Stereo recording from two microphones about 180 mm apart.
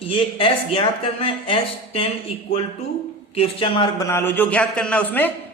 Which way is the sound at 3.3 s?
30° left (ahead or behind).